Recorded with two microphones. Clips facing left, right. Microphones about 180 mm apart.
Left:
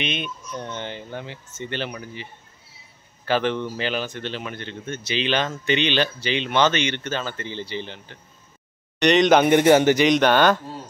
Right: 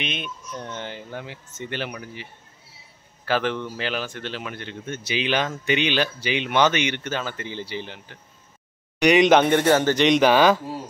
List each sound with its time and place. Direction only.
0.0 s speech: 5° right (ahead or behind)
3.3 s speech: 5° right (ahead or behind)
9.4 s a man's voice: 15° left (ahead or behind)
10.0 s speech: centre (ahead or behind)